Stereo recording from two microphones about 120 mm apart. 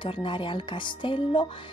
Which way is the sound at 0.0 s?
45° left (ahead or behind).